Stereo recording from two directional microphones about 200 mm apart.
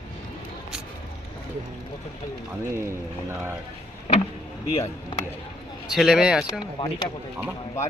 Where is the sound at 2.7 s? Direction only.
15° right (ahead or behind).